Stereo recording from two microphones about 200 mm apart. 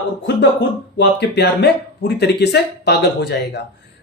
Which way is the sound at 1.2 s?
60° left (ahead or behind).